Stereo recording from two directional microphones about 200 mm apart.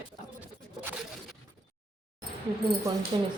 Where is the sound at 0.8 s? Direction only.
10° right (ahead or behind).